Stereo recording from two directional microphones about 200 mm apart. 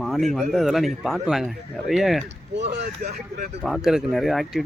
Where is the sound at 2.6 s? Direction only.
55° right (ahead or behind).